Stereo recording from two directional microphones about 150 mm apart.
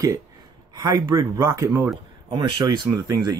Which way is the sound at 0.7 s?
25° right (ahead or behind).